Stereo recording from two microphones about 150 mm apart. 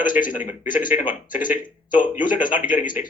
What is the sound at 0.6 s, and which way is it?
Speech, 65° left (ahead or behind).